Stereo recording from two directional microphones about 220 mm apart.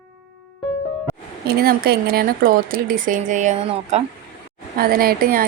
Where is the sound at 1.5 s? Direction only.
45° right (ahead or behind).